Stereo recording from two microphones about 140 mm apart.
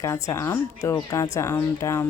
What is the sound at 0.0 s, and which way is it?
Speech, 20° left (ahead or behind).